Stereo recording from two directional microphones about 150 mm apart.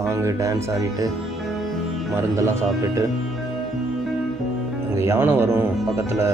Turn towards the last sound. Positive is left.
turn(degrees=-15)  # may be behind; listen again after turning